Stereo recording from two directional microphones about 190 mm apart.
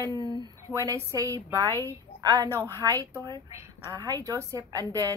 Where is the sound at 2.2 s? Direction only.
20° right (ahead or behind).